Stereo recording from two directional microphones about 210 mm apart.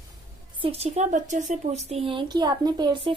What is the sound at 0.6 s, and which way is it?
Speech, 30° right (ahead or behind).